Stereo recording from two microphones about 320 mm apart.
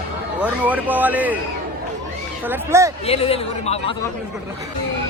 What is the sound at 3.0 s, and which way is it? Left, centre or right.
Speech, centre.